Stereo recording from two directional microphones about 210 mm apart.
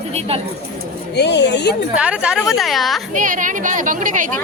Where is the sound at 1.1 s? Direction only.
55° left (ahead or behind).